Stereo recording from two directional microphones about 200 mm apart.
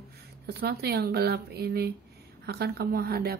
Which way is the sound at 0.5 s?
50° right (ahead or behind).